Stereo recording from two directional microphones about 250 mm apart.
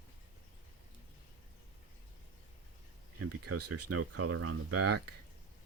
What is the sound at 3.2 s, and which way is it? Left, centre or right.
Speech, right.